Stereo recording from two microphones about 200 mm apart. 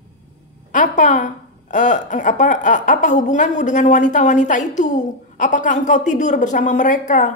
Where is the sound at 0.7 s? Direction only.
40° left (ahead or behind).